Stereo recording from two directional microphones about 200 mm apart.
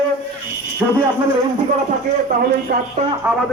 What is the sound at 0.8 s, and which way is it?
Speech, 10° right (ahead or behind).